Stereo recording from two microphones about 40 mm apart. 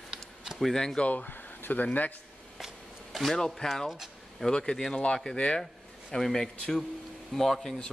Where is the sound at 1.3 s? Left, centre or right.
Left.